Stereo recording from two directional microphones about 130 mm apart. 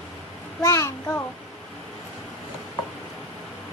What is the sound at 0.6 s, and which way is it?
Speech, 25° left (ahead or behind).